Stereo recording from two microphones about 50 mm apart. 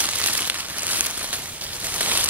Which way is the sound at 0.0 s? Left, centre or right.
Right.